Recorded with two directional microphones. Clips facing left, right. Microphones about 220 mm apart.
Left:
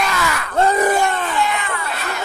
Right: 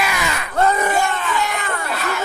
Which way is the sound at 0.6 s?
40° left (ahead or behind).